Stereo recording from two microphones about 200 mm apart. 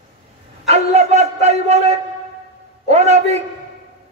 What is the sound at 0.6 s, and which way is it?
A man's voice, 35° right (ahead or behind).